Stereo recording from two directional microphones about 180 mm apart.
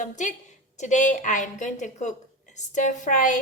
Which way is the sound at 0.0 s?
45° left (ahead or behind).